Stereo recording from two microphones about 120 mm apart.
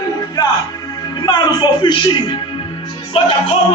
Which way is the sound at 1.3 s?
40° left (ahead or behind).